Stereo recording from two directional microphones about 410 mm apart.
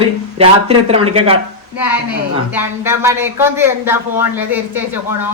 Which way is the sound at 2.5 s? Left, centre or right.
Centre.